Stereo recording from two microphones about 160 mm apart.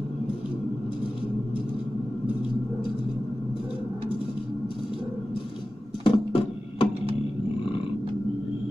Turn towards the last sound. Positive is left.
turn(degrees=35)  # may be behind; listen again after turning